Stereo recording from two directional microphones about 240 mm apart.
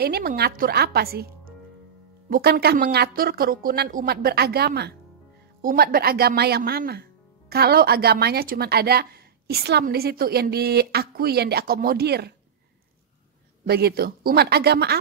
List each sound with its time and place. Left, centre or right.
0.0 s a woman's voice: right
13.7 s a woman's voice: right